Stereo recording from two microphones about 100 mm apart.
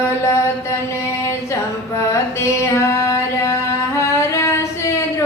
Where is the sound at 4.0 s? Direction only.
30° left (ahead or behind).